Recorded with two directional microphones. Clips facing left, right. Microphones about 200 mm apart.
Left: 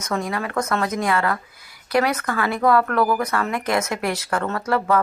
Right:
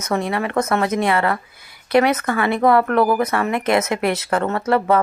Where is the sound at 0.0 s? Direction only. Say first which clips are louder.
Right 4 dB; 25° right (ahead or behind).